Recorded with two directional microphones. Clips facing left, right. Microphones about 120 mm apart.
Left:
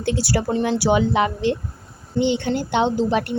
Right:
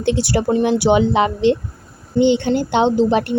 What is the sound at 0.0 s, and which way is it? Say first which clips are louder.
Speech: right 4 dB; 20° right (ahead or behind).